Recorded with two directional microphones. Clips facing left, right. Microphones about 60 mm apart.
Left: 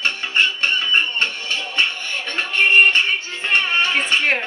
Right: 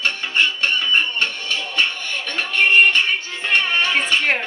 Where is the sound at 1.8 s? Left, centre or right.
Left.